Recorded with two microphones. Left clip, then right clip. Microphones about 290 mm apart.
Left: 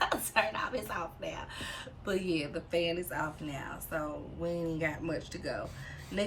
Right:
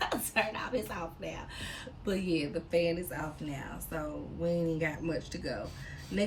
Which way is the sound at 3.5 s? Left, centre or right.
Centre.